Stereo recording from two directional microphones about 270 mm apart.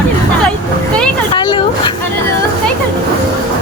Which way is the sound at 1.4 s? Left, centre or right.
Centre.